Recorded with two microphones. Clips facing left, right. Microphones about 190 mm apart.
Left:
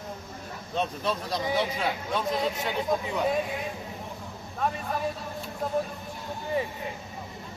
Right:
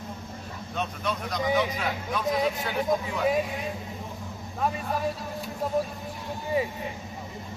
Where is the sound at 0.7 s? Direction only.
30° left (ahead or behind).